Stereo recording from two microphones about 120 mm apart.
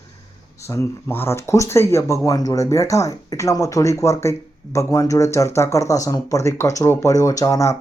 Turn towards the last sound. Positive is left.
turn(degrees=25)  # may be behind; listen again after turning